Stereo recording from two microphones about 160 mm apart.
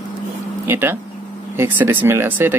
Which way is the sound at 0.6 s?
15° right (ahead or behind).